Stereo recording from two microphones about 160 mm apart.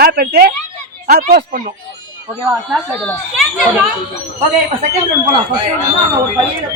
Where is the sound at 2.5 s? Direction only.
5° left (ahead or behind).